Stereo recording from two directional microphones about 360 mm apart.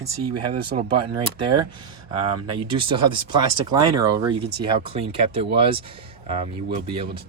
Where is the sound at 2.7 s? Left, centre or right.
Centre.